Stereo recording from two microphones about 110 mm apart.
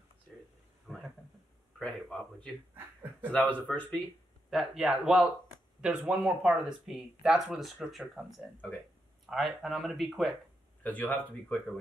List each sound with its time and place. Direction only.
0.8 s a sound: centre (ahead or behind)
1.8 s speech: 10° left (ahead or behind)
2.7 s a sound: 15° right (ahead or behind)
3.3 s speech: 10° left (ahead or behind)
4.5 s speech: 5° right (ahead or behind)
10.8 s speech: 15° left (ahead or behind)